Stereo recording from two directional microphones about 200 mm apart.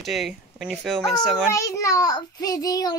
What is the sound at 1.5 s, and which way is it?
A child's voice, 15° left (ahead or behind).